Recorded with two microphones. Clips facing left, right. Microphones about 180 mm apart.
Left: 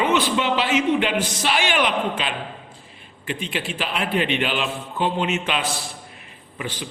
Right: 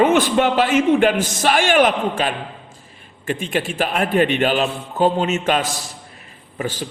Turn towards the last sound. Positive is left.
turn(degrees=-40)  # may be behind; listen again after turning